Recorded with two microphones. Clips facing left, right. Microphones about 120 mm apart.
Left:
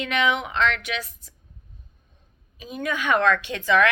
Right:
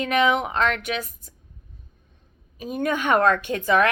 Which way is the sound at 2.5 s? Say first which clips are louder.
Right 4 dB; 50° right (ahead or behind).